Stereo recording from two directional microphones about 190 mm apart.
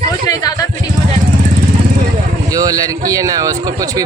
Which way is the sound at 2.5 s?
20° right (ahead or behind).